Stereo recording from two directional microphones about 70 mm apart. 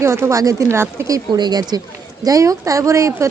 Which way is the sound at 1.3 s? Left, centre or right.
Right.